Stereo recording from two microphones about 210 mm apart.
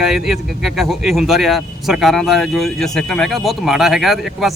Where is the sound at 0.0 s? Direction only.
Centre (ahead or behind).